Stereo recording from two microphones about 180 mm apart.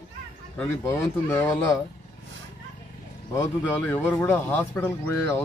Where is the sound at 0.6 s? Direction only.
10° left (ahead or behind).